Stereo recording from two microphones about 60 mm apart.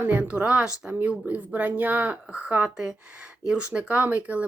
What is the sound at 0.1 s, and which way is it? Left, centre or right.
A woman's voice, right.